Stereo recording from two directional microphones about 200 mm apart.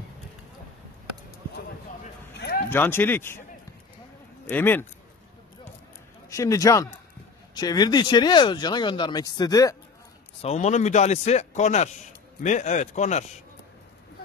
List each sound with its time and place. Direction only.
2.3 s a sound: 55° left (ahead or behind)
2.7 s speech: 10° left (ahead or behind)
4.5 s speech: 10° left (ahead or behind)
6.2 s speech: 15° left (ahead or behind)
10.4 s a man's voice: 35° left (ahead or behind)